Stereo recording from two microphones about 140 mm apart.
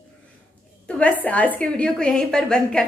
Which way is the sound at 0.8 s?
10° left (ahead or behind).